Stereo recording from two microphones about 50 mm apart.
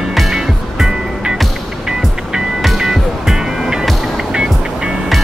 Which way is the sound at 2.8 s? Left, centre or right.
Centre.